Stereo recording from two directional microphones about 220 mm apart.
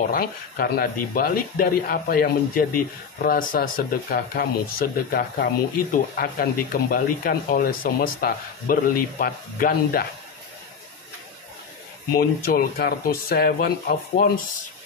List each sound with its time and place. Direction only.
0.0 s speech: 40° left (ahead or behind)
12.2 s speech: 45° left (ahead or behind)